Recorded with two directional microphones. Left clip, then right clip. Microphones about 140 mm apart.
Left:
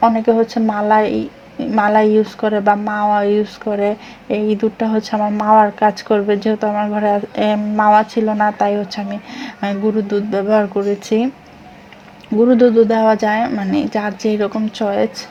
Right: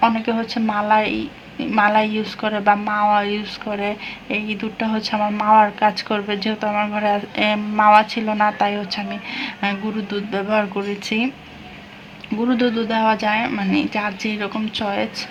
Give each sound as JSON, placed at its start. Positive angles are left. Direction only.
{"t": 0.0, "sound": "a woman's voice", "side_deg": 40}
{"t": 12.5, "sound": "speech", "side_deg": 40}